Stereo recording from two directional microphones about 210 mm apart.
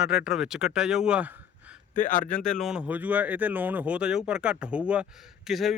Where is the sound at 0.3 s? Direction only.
Centre (ahead or behind).